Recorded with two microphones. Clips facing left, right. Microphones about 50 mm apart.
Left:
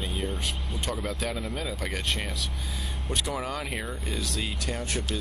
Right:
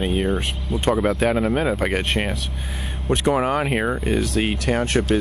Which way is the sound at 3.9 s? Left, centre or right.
Right.